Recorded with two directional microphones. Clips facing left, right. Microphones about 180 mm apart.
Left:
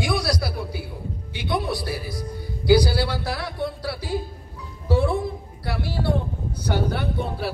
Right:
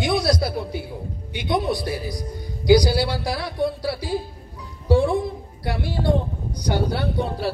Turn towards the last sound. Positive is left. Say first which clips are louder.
# right 2 dB
turn(degrees=-15)  # may be behind; listen again after turning